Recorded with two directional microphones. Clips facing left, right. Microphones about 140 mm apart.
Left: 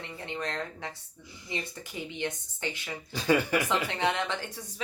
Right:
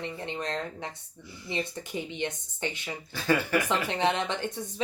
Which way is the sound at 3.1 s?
15° left (ahead or behind).